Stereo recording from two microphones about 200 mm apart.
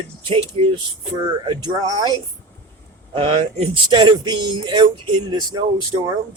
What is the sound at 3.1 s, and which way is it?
Speech, 25° right (ahead or behind).